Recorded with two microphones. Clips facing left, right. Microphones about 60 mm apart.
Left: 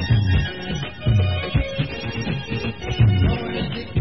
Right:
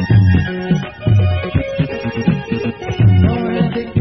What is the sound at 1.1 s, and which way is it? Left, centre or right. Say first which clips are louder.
Music: right 5 dB; centre.